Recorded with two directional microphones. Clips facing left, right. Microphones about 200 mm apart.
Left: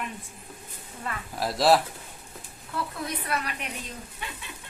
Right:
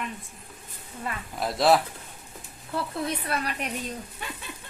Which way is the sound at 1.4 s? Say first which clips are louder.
Even; centre (ahead or behind).